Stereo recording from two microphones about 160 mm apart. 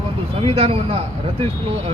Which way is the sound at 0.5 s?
40° right (ahead or behind).